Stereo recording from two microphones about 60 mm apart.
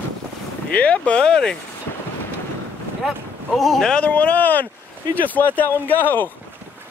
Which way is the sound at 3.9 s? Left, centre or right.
Left.